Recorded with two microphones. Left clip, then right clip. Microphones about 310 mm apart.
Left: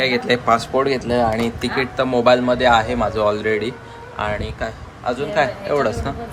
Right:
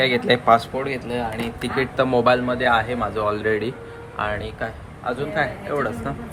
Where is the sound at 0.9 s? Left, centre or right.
Left.